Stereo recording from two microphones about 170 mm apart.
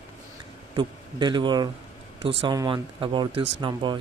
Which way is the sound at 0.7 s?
25° right (ahead or behind).